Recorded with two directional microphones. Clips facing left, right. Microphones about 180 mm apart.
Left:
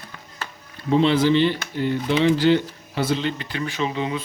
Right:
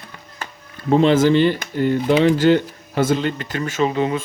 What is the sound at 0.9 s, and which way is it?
Speech, 45° right (ahead or behind).